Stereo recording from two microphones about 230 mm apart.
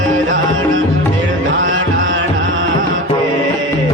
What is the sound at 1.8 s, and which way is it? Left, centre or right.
Music, right.